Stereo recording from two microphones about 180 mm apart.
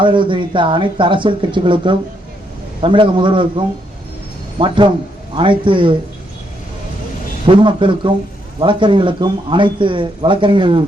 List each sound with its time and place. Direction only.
0.0 s speech: 25° right (ahead or behind)
7.4 s speech: 25° right (ahead or behind)